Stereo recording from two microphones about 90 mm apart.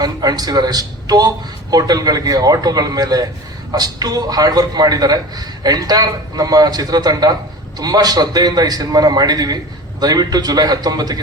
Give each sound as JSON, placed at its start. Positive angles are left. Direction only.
{"t": 0.0, "sound": "a man's voice", "side_deg": -45}